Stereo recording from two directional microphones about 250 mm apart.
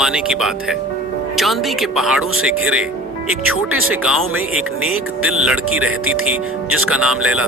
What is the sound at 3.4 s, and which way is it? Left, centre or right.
Speech, right.